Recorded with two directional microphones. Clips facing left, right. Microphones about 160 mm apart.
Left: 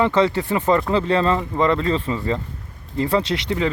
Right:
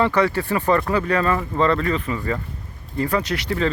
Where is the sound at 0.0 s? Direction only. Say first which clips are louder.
Left 1 dB; 20° left (ahead or behind).